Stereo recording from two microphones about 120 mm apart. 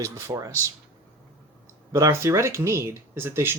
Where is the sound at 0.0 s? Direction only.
25° right (ahead or behind).